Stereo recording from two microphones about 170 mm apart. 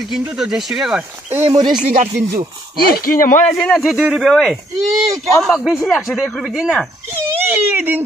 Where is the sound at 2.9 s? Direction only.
60° left (ahead or behind).